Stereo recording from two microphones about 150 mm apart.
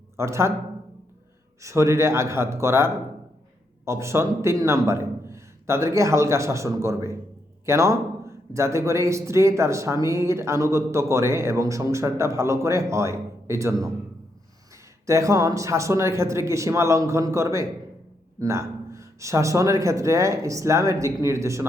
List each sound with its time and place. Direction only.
0.2 s a man's voice: 20° right (ahead or behind)
1.6 s a man's voice: 20° right (ahead or behind)
15.0 s a man's voice: 20° right (ahead or behind)